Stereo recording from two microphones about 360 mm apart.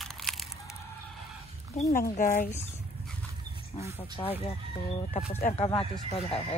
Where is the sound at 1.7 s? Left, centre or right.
Left.